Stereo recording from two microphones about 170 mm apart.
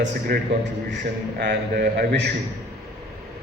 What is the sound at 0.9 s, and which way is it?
A man's voice, 80° right.